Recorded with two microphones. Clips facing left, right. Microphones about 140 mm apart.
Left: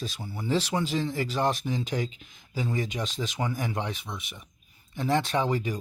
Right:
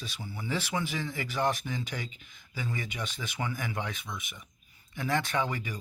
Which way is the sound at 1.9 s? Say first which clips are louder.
Left 8 dB; 40° left (ahead or behind).